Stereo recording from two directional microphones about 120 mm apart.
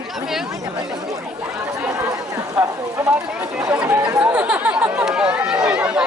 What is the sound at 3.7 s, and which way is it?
Speech, 10° right (ahead or behind).